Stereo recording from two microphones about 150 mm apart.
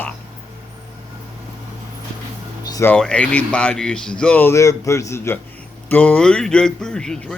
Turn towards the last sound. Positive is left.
turn(degrees=5)  # may be behind; listen again after turning